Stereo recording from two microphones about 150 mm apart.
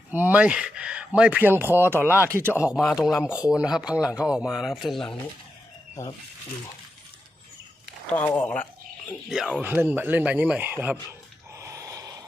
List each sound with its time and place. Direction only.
0.1 s speech: 10° right (ahead or behind)
2.6 s speech: 5° right (ahead or behind)
6.0 s speech: 20° left (ahead or behind)
8.1 s speech: 10° left (ahead or behind)
9.3 s speech: 5° right (ahead or behind)
11.5 s a sound: 20° right (ahead or behind)